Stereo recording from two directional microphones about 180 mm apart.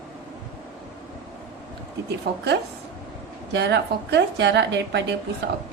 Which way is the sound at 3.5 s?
70° right (ahead or behind).